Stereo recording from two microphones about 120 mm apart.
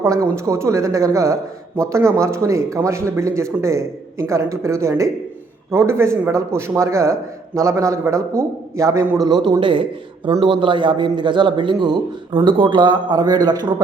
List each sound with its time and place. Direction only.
0.0 s a man's voice: 25° right (ahead or behind)